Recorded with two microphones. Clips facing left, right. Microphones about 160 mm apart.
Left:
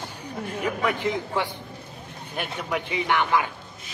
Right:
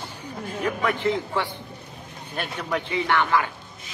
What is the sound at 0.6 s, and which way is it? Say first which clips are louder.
A man's voice: right 2 dB; 10° left (ahead or behind).